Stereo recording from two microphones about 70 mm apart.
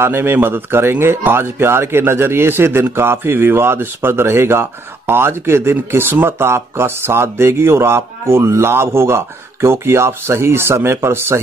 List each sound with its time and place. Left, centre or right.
0.0 s speech: right